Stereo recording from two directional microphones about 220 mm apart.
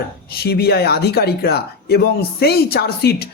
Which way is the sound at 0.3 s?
45° left (ahead or behind).